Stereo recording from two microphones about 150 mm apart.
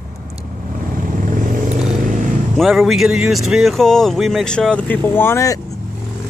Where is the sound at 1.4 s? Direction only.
60° right (ahead or behind).